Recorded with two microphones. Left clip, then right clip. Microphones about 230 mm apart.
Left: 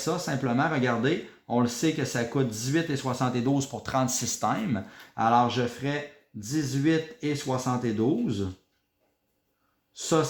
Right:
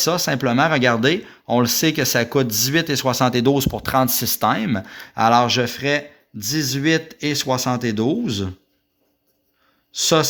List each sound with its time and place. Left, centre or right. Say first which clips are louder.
0.0 s speech: right 10 dB; right
10.0 s speech: right 8 dB; right